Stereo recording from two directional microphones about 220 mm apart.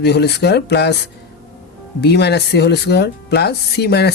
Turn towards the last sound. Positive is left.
turn(degrees=50)  # may be behind; listen again after turning